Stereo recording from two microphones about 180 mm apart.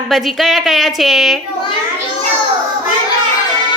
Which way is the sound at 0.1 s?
Centre (ahead or behind).